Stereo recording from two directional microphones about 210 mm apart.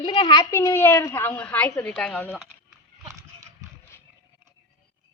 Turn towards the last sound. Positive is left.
turn(degrees=-15)  # may be behind; listen again after turning